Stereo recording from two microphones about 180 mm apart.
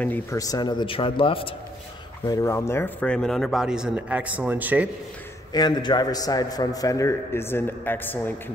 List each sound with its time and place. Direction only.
0.0 s a man's voice: 10° left (ahead or behind); by 1.5 s 30° left (ahead or behind)
2.2 s speech: 15° left (ahead or behind); by 4.8 s 10° right (ahead or behind)
5.5 s a man's voice: 25° left (ahead or behind)